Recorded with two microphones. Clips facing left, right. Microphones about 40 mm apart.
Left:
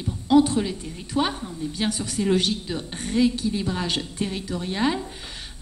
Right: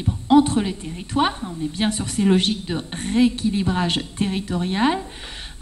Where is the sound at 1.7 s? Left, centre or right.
Right.